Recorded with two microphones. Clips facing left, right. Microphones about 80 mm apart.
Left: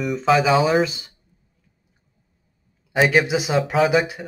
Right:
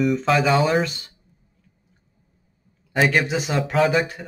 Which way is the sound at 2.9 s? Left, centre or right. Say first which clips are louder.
Left 2 dB; centre.